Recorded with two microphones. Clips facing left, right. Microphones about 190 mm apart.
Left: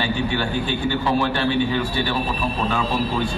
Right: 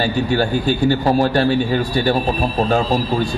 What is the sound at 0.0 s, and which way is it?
A man's voice, 40° right (ahead or behind).